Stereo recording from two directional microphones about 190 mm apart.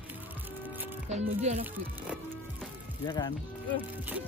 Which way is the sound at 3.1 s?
25° left (ahead or behind).